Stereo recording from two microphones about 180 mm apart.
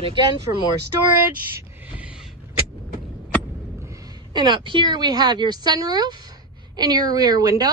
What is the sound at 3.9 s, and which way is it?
A woman's voice, 25° right (ahead or behind).